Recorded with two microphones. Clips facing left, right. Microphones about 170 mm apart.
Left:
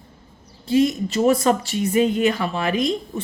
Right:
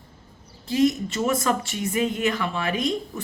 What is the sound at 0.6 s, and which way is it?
Speech, 30° left (ahead or behind).